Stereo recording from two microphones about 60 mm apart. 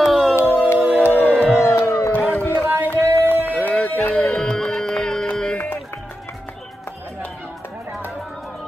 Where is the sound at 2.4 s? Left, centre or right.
Left.